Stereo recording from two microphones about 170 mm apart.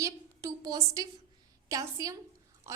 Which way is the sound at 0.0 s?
20° right (ahead or behind).